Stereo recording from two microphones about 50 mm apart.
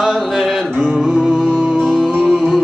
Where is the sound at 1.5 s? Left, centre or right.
Right.